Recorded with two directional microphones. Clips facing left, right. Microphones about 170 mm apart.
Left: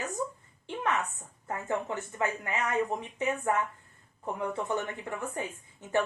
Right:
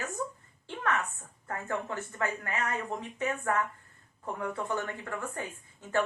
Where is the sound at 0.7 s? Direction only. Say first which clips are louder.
Left 1 dB; 15° left (ahead or behind).